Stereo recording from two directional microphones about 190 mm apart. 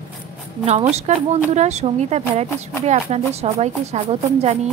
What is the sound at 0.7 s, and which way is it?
A woman's voice, 35° right (ahead or behind).